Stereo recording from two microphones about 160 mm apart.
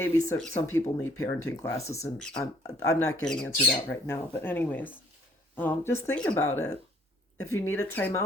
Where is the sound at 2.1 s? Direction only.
5° left (ahead or behind).